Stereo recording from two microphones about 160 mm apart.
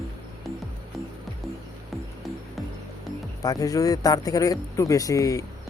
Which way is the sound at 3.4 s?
25° left (ahead or behind).